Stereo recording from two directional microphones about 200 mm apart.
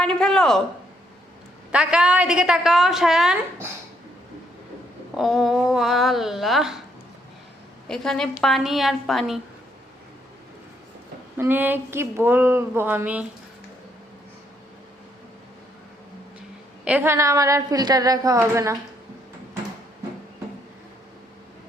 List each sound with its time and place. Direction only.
0.0 s a woman's voice: 5° left (ahead or behind)
1.7 s a woman's voice: 5° right (ahead or behind)
5.1 s a woman's voice: centre (ahead or behind)
7.9 s a woman's voice: centre (ahead or behind)
11.3 s a woman's voice: 10° right (ahead or behind)
16.8 s a woman's voice: 10° right (ahead or behind)